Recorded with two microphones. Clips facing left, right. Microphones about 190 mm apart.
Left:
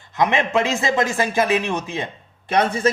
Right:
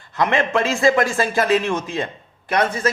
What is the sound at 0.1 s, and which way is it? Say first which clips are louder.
A man's voice: even; 15° left (ahead or behind).